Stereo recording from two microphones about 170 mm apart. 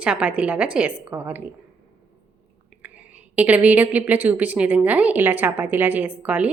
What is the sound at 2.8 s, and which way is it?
A woman's voice, 10° right (ahead or behind).